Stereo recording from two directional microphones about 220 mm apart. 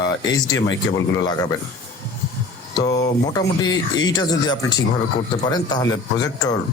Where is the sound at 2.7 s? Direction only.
15° left (ahead or behind).